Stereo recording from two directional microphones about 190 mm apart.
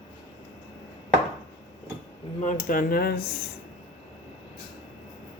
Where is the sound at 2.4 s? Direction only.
40° left (ahead or behind).